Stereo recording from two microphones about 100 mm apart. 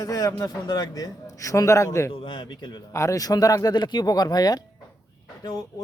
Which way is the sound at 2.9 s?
35° left (ahead or behind).